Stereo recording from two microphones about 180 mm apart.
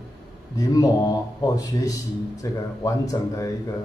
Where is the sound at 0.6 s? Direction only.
20° left (ahead or behind).